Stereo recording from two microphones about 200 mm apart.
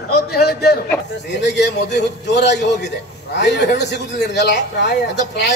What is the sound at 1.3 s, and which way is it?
A man's voice, 60° left (ahead or behind).